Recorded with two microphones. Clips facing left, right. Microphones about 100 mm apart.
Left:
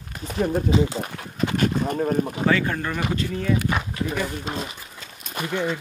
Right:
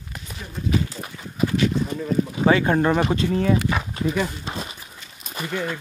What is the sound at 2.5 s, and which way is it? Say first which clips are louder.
Speech: right 9 dB; 25° right (ahead or behind).